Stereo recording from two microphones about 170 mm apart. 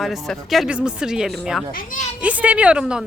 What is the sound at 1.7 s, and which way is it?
Speech, 50° left (ahead or behind).